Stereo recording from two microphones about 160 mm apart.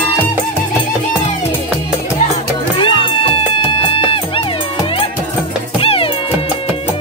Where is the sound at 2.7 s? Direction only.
30° left (ahead or behind).